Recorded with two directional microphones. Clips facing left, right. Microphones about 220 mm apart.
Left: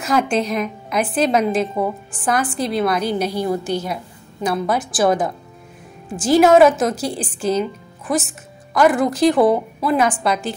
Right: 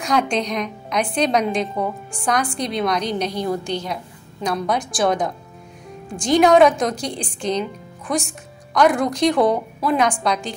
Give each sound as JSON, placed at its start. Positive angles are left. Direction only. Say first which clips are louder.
{"t": 0.0, "sound": "a woman's voice", "louder": "left 2 dB", "side_deg": 5}